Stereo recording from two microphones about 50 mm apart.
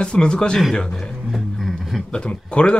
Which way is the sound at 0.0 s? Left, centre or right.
Centre.